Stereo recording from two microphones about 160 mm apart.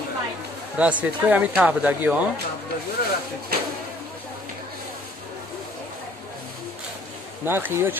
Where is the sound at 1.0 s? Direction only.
10° right (ahead or behind).